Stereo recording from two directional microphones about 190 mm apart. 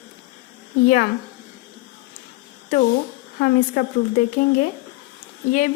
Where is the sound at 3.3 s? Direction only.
55° left (ahead or behind).